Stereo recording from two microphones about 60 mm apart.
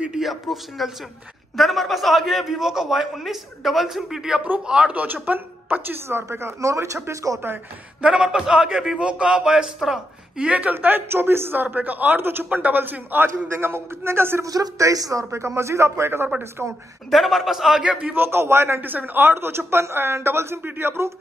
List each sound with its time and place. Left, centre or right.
0.2 s a man's voice: centre
4.9 s a woman's voice: right
6.3 s speech: right
7.5 s speech: right
8.0 s a man's voice: centre
10.5 s speech: right
14.4 s speech: right
15.3 s speech: right
16.6 s a man's voice: centre
18.1 s speech: right
18.8 s speech: right